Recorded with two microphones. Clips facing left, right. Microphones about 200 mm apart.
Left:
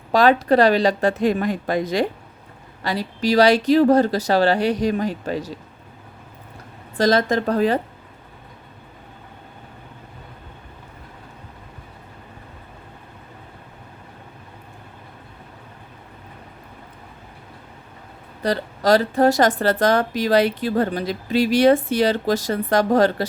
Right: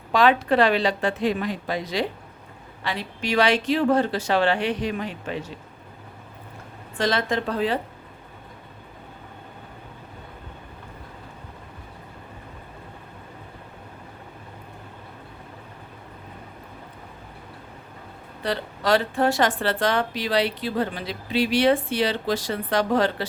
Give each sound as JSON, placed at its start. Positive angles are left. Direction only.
{"t": 0.1, "sound": "speech", "side_deg": 40}
{"t": 6.9, "sound": "speech", "side_deg": 40}
{"t": 18.4, "sound": "a woman's voice", "side_deg": 40}